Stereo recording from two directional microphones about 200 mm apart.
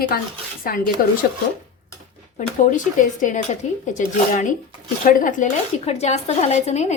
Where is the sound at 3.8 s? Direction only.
40° left (ahead or behind).